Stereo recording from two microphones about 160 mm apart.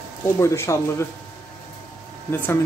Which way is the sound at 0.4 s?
20° left (ahead or behind).